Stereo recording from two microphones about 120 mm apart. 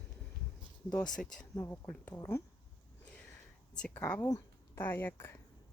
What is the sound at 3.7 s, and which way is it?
Speech, 10° left (ahead or behind).